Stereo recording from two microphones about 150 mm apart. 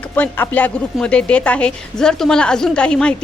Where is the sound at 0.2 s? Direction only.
10° left (ahead or behind).